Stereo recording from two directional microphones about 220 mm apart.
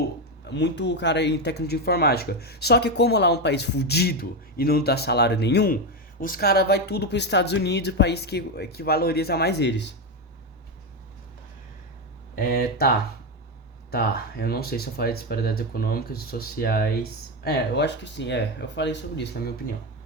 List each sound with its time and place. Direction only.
0.5 s speech: 50° left (ahead or behind)
12.4 s speech: 40° left (ahead or behind)
13.9 s speech: 45° left (ahead or behind)